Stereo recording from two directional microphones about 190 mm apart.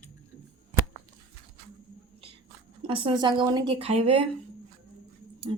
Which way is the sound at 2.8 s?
30° right (ahead or behind).